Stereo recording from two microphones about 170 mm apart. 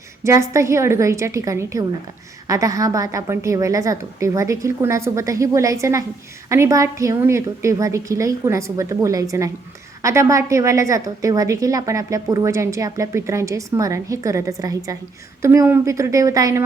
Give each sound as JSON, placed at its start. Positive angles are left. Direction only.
{"t": 0.2, "sound": "a woman's voice", "side_deg": -20}